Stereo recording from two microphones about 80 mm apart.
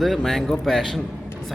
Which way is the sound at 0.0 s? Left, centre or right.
Centre.